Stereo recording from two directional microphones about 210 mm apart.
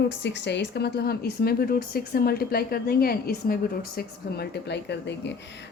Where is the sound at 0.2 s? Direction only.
55° left (ahead or behind).